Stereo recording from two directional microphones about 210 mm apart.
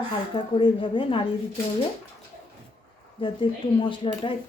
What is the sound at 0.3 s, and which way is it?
Speech, 25° left (ahead or behind).